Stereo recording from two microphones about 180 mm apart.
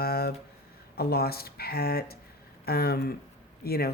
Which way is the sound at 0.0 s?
60° left (ahead or behind).